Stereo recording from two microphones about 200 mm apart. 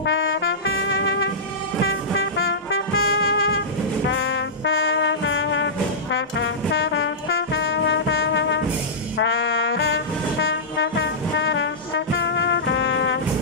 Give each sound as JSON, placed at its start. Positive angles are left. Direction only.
{"t": 0.0, "sound": "brass instrument", "side_deg": 75}
{"t": 0.5, "sound": "music", "side_deg": 70}
{"t": 3.0, "sound": "music", "side_deg": 80}
{"t": 4.1, "sound": "brass instrument", "side_deg": 65}
{"t": 12.2, "sound": "music", "side_deg": 60}